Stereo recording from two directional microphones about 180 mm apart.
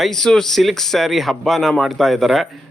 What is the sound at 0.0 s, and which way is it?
Speech, centre (ahead or behind).